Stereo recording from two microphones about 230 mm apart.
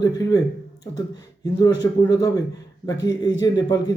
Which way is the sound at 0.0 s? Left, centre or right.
Centre.